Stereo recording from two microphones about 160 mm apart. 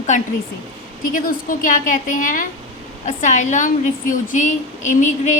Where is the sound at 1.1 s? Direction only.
60° left (ahead or behind).